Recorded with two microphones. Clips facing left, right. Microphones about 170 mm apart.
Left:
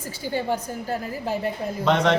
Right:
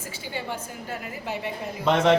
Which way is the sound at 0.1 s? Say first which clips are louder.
Left 8 dB; 40° left (ahead or behind).